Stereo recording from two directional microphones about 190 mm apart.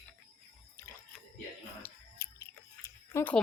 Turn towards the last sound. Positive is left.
turn(degrees=10)  # may be behind; listen again after turning